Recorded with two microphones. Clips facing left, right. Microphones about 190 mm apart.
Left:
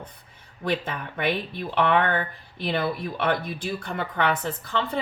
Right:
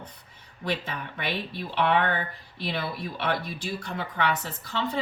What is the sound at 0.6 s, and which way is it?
A woman's voice, 50° left (ahead or behind).